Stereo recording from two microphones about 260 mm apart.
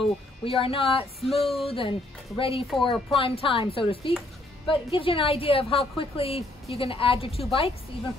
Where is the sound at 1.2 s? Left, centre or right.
Centre.